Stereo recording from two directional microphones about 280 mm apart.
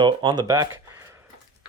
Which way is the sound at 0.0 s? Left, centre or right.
Centre.